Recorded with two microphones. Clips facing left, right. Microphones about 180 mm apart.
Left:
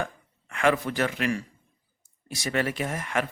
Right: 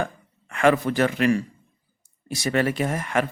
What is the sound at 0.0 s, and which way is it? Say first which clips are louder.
Speech: right 4 dB; 45° right (ahead or behind).